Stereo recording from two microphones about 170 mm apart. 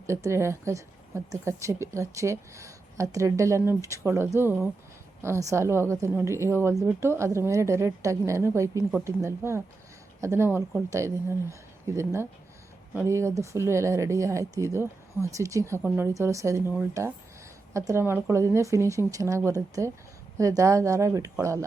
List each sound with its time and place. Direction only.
0.1 s speech: 15° right (ahead or behind)
17.7 s speech: 15° right (ahead or behind)